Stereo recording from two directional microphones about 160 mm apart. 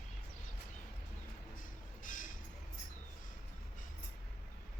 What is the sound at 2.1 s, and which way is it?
Music, 55° left (ahead or behind).